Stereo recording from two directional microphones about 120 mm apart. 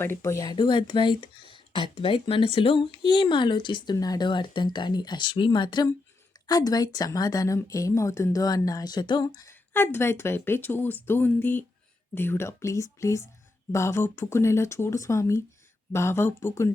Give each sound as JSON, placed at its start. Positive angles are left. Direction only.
{"t": 0.0, "sound": "a woman's voice", "side_deg": 20}
{"t": 0.5, "sound": "a woman's voice", "side_deg": 40}